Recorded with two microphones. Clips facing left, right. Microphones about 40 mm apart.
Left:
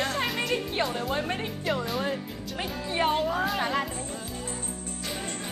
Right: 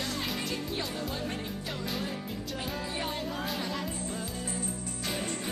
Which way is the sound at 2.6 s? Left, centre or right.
Left.